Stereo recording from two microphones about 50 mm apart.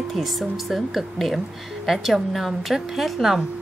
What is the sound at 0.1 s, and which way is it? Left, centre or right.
A woman's voice, centre.